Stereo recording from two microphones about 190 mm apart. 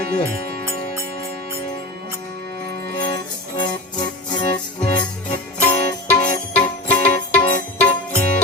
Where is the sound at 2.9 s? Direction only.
25° left (ahead or behind).